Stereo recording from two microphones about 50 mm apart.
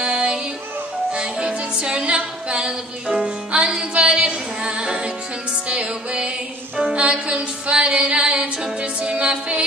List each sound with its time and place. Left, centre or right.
0.0 s music: centre